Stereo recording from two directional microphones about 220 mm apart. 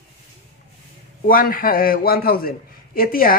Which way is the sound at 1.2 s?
40° left (ahead or behind).